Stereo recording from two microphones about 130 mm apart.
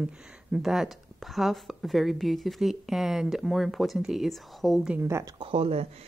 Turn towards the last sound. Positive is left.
turn(degrees=-50)  # may be behind; listen again after turning